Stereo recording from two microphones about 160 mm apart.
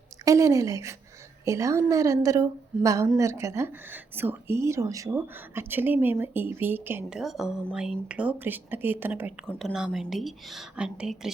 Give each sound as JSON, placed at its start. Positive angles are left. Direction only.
{"t": 0.3, "sound": "a woman's voice", "side_deg": -20}
{"t": 7.2, "sound": "a woman's voice", "side_deg": 0}
{"t": 9.6, "sound": "a woman's voice", "side_deg": 0}